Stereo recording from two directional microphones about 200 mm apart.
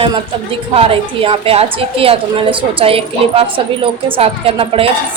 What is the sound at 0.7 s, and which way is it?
A woman's voice, 25° right (ahead or behind).